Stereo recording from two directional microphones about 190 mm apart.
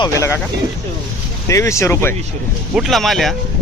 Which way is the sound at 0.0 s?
15° left (ahead or behind).